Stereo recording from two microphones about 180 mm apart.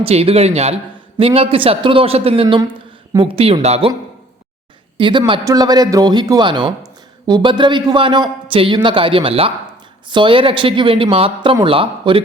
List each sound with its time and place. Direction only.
0.0 s a man's voice: 35° right (ahead or behind)
4.9 s a man's voice: 25° right (ahead or behind)